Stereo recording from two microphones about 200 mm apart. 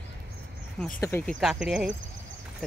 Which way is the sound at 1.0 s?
10° left (ahead or behind).